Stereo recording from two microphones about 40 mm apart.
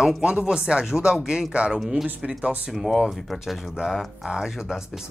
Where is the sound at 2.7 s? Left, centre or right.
Centre.